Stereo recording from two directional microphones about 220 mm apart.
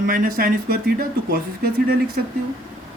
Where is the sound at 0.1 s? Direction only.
40° right (ahead or behind).